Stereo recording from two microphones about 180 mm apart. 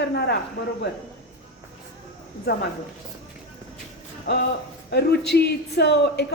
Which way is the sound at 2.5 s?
60° left (ahead or behind).